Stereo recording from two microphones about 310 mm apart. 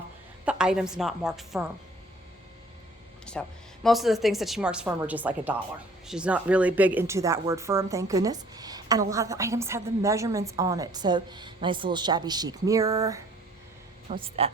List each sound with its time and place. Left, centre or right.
0.4 s speech: centre
3.3 s a woman's voice: centre